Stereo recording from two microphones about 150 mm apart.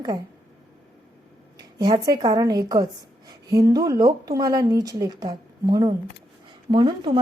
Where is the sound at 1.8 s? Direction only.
25° right (ahead or behind).